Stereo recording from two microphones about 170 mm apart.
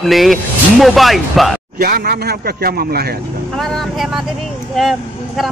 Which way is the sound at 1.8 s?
60° right (ahead or behind).